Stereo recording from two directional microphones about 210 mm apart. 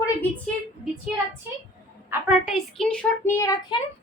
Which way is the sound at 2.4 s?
Centre (ahead or behind).